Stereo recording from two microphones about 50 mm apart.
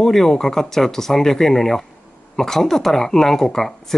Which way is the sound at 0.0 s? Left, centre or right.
Centre.